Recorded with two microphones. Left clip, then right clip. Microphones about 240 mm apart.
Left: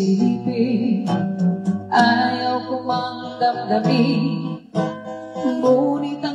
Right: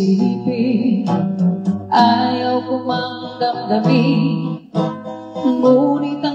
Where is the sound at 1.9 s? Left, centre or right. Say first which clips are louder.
Right 3 dB; right.